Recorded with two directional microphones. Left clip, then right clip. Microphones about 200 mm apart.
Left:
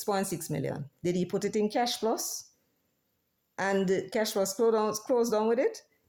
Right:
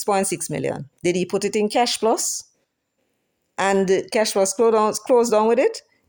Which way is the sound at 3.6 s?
35° right (ahead or behind).